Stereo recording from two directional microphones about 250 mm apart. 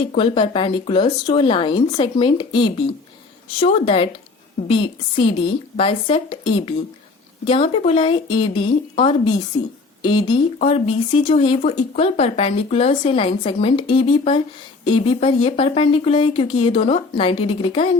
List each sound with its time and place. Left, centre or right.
0.2 s speech: left